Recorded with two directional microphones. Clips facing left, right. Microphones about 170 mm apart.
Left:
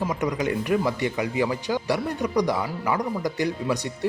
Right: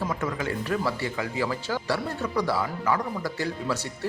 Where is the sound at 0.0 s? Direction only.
15° left (ahead or behind).